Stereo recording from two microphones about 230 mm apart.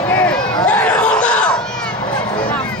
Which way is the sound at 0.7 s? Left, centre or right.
Centre.